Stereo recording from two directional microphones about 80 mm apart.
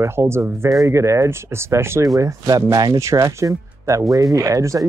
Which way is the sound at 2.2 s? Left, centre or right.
Right.